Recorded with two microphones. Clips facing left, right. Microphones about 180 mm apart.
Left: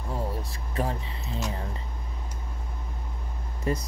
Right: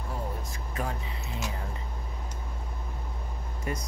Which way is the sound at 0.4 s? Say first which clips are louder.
Left 4 dB; 35° left (ahead or behind).